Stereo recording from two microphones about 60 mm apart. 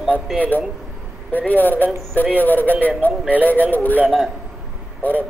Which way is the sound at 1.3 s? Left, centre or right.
Left.